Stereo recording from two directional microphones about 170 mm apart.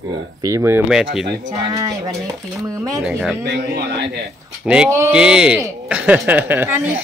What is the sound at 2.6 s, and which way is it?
Speech, 20° right (ahead or behind).